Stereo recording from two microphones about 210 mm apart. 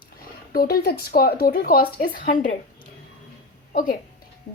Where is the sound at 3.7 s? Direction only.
40° left (ahead or behind).